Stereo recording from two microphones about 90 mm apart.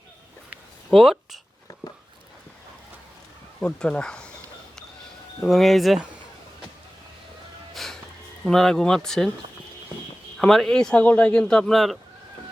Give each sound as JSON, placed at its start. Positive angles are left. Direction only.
{"t": 0.9, "sound": "speech", "side_deg": 0}
{"t": 3.6, "sound": "a man's voice", "side_deg": 10}
{"t": 5.5, "sound": "speech", "side_deg": 0}
{"t": 7.7, "sound": "music", "side_deg": 0}
{"t": 8.4, "sound": "speech", "side_deg": 5}
{"t": 10.3, "sound": "a man's voice", "side_deg": 5}